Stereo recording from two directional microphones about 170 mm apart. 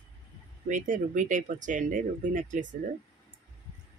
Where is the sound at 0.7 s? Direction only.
50° right (ahead or behind).